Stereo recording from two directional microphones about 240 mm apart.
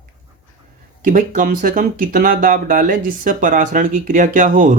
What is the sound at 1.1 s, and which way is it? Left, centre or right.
Speech, right.